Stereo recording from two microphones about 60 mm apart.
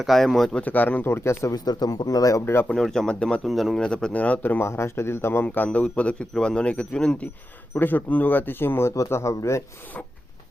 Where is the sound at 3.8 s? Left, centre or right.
Centre.